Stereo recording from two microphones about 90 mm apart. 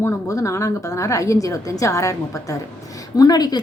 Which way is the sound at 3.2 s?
45° left (ahead or behind).